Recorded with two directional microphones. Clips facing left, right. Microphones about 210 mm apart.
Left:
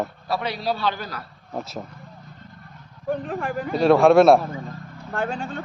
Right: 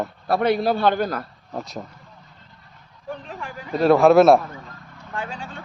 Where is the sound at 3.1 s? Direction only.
50° left (ahead or behind).